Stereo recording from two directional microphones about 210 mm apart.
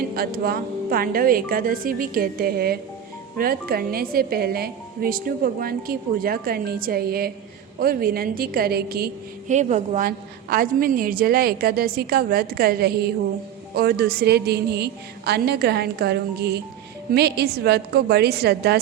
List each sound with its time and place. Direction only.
0.0 s a woman's voice: 45° right (ahead or behind)
9.5 s a woman's voice: 35° right (ahead or behind); by 18.8 s 50° right (ahead or behind)